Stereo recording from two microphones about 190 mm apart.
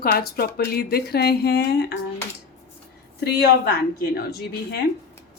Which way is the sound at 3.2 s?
60° left (ahead or behind).